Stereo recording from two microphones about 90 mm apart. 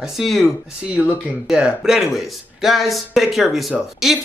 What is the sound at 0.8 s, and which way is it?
A man's voice, 15° right (ahead or behind).